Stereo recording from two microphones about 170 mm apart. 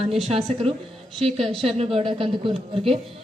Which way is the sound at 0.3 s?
35° right (ahead or behind).